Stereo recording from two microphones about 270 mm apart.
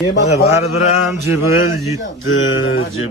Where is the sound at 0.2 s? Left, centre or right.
Left.